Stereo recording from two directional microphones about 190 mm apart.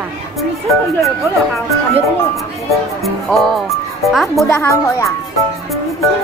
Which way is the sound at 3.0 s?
Centre (ahead or behind).